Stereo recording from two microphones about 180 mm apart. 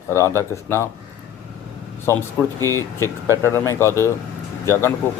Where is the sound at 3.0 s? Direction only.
20° right (ahead or behind).